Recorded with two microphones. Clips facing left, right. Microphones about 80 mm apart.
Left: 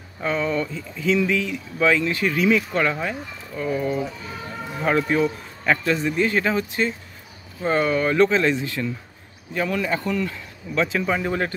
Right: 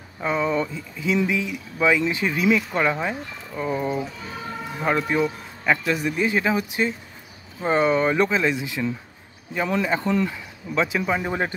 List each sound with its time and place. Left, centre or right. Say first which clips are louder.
0.2 s speech: right 1 dB; centre
4.8 s speech: left 2 dB; centre